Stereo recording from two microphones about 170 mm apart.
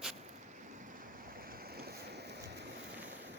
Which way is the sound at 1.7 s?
70° right (ahead or behind).